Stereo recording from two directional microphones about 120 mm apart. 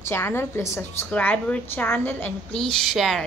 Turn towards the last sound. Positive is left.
turn(degrees=0)  # may be behind; listen again after turning